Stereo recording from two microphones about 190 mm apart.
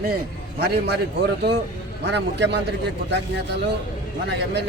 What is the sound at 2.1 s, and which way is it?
Speech, 65° right (ahead or behind).